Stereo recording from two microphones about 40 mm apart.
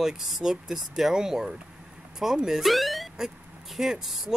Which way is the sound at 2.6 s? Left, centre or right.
Centre.